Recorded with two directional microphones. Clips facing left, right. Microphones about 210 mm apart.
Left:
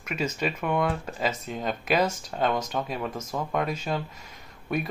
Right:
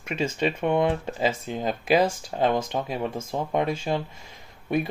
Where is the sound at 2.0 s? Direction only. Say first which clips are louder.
Right 3 dB; 30° right (ahead or behind).